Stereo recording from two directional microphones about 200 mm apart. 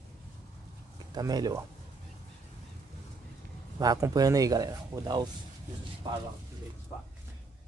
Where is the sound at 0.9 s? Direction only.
20° right (ahead or behind).